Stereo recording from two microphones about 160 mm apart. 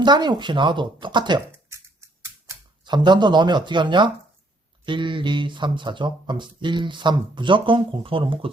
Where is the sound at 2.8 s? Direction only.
30° right (ahead or behind).